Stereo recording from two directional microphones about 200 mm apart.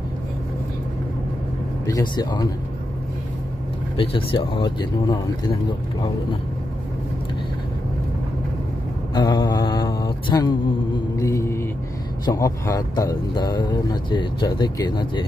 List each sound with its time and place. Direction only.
1.9 s speech: 20° left (ahead or behind)
3.9 s speech: 25° left (ahead or behind)
9.1 s mantra: 20° left (ahead or behind)
12.3 s speech: 15° left (ahead or behind)